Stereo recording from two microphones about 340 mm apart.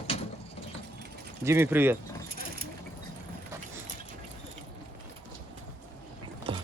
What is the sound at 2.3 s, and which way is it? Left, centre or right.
Vehicle, right.